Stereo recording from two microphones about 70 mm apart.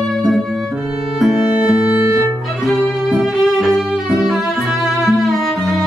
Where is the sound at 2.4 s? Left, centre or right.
Centre.